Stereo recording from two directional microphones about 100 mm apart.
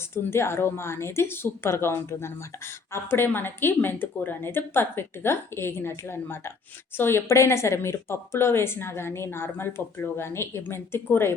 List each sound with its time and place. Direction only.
0.1 s speech: 25° left (ahead or behind)